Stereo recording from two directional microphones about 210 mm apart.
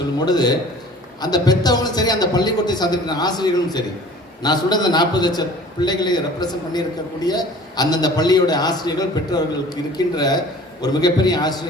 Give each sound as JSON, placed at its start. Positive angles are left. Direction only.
{"t": 0.2, "sound": "a man's voice", "side_deg": 20}